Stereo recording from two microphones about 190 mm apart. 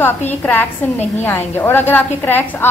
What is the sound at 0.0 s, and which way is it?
A woman's voice, 10° left (ahead or behind).